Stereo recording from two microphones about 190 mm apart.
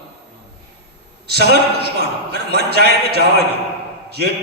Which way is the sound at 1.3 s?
55° right (ahead or behind).